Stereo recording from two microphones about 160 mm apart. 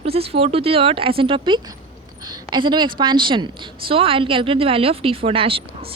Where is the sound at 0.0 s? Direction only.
40° right (ahead or behind).